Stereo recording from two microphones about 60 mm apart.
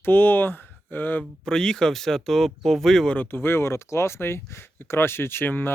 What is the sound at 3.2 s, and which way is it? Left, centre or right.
Speech, left.